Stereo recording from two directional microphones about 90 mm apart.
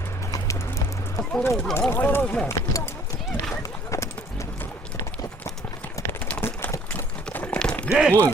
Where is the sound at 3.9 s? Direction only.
35° left (ahead or behind).